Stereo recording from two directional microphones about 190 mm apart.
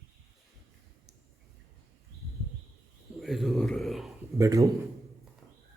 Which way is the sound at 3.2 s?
Centre (ahead or behind).